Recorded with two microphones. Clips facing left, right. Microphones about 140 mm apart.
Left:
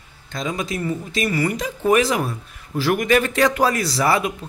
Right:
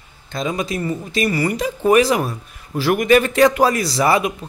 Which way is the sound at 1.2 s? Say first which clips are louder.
Right 2 dB; 35° right (ahead or behind).